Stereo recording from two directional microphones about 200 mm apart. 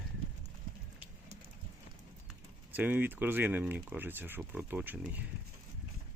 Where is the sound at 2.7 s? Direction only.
10° right (ahead or behind).